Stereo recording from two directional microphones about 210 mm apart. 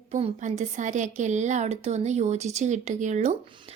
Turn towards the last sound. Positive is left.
turn(degrees=-25)  # may be behind; listen again after turning